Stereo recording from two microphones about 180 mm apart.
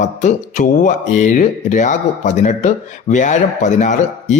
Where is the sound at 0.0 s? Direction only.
40° left (ahead or behind).